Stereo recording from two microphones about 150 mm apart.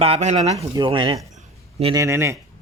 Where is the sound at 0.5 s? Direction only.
30° right (ahead or behind).